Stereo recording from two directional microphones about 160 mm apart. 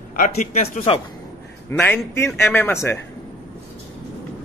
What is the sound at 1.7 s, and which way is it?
Speech, 15° left (ahead or behind).